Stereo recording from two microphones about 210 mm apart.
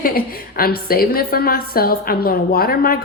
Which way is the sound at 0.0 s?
45° left (ahead or behind).